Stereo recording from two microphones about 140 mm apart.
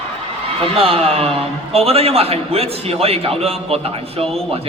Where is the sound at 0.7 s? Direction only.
45° right (ahead or behind).